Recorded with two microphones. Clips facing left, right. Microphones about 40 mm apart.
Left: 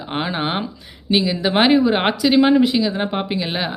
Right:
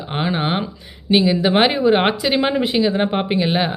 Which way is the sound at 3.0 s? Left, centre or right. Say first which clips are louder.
Right 4 dB; centre.